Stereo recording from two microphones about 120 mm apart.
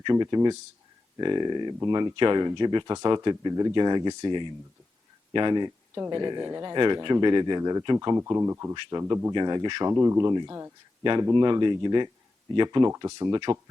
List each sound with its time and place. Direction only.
0.0 s speech: 35° right (ahead or behind)
8.7 s speech: 35° right (ahead or behind)
9.3 s speech: 40° right (ahead or behind)
9.9 s speech: 25° right (ahead or behind)